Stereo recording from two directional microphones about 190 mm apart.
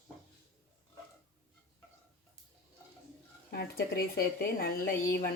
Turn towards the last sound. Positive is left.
turn(degrees=55)  # may be behind; listen again after turning